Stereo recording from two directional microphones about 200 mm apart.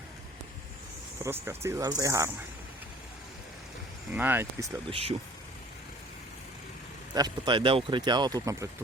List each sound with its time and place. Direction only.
1.2 s speech: 10° right (ahead or behind)
4.1 s speech: 10° right (ahead or behind)
4.9 s speech: 30° right (ahead or behind)
7.1 s speech: 20° right (ahead or behind)